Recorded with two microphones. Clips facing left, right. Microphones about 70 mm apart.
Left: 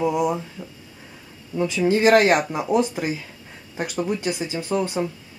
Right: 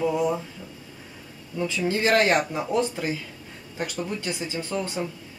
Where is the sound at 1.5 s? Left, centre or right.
Centre.